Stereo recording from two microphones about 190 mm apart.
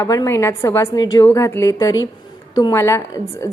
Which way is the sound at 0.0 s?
15° left (ahead or behind).